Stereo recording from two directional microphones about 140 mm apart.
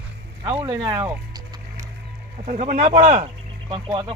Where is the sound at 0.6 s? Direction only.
30° right (ahead or behind).